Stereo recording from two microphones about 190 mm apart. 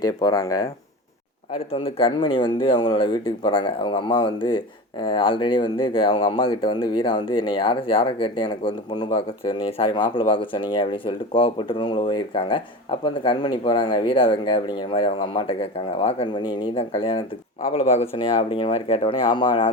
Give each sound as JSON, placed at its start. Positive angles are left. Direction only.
{"t": 0.0, "sound": "speech", "side_deg": 20}
{"t": 1.7, "sound": "speech", "side_deg": 30}